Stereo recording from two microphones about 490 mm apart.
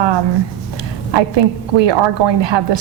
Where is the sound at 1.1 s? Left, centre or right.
Right.